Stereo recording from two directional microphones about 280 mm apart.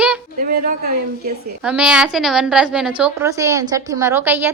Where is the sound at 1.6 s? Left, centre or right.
Centre.